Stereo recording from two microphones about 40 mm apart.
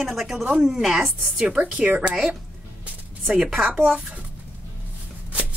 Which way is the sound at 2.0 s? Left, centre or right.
Centre.